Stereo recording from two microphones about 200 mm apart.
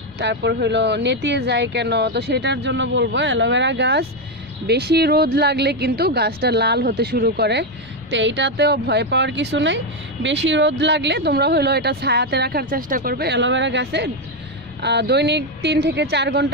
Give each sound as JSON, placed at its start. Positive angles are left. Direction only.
{"t": 0.2, "sound": "a woman's voice", "side_deg": -60}